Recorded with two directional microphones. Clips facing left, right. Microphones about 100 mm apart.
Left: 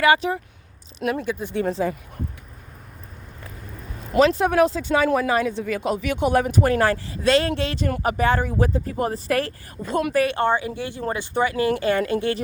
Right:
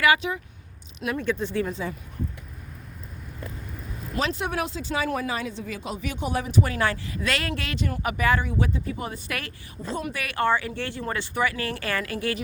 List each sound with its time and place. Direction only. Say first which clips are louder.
0.0 s speech: left 4 dB; 30° left (ahead or behind)
1.2 s speech: right 1 dB; 10° left (ahead or behind)
1.6 s speech: left 7 dB; 35° left (ahead or behind)
4.4 s speech: left 10 dB; 40° left (ahead or behind)
4.8 s speech: left 7 dB; 60° left (ahead or behind); by 5.3 s 80° left
5.3 s a man's voice: left 9 dB; 55° left (ahead or behind); by 9.5 s 35° left (ahead or behind)
10.2 s speech: left 3 dB; 25° left (ahead or behind)